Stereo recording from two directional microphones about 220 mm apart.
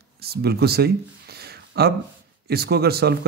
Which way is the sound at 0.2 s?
45° right (ahead or behind).